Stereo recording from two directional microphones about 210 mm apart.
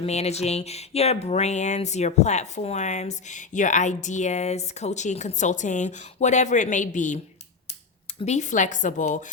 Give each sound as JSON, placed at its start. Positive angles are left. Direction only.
{"t": 0.0, "sound": "speech", "side_deg": 30}
{"t": 8.2, "sound": "speech", "side_deg": 35}